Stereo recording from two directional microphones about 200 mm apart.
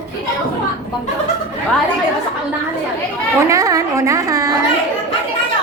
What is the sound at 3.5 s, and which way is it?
A woman's voice, 15° right (ahead or behind).